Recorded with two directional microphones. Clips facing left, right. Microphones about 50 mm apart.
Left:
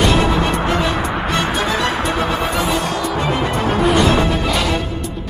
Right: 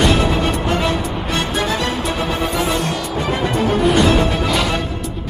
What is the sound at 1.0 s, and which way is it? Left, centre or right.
Music, left.